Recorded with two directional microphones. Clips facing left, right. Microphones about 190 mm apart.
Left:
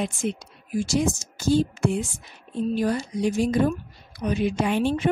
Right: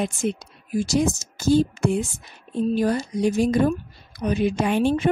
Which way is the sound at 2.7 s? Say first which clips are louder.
Right 2 dB; 40° right (ahead or behind).